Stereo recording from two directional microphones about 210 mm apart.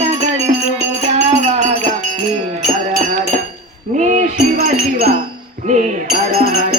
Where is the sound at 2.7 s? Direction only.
40° right (ahead or behind).